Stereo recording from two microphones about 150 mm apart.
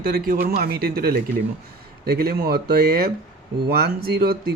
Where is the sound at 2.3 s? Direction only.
90° right.